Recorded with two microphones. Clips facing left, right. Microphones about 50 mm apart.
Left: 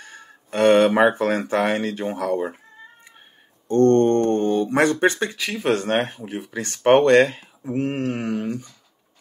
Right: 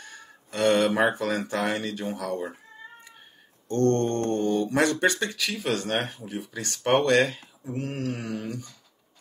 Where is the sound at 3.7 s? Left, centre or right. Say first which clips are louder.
Left 8 dB; left.